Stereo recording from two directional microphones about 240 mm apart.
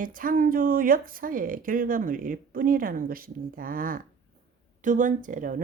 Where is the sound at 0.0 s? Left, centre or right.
Right.